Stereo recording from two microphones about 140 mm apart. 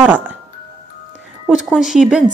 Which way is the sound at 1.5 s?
5° right (ahead or behind).